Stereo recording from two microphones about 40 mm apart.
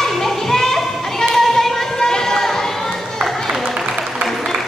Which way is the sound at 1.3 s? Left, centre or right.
Centre.